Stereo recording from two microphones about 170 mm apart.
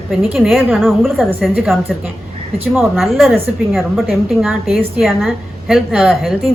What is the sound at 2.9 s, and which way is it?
A woman's voice, centre (ahead or behind).